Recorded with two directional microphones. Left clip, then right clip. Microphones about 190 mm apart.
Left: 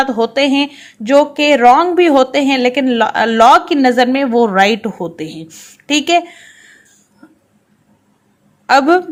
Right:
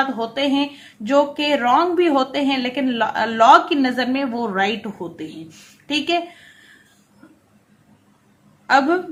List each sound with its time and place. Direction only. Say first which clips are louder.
0.0 s speech: left 8 dB; 40° left (ahead or behind)
8.6 s a woman's voice: left 6 dB; 50° left (ahead or behind)